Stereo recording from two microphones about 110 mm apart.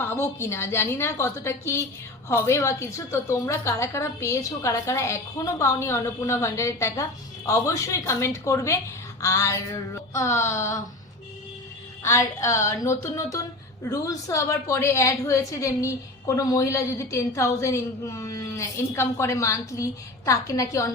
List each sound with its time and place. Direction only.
0.0 s a woman's voice: 20° left (ahead or behind)
12.0 s a woman's voice: 25° left (ahead or behind)